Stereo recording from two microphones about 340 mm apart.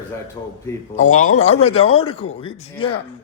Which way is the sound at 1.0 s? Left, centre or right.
Left.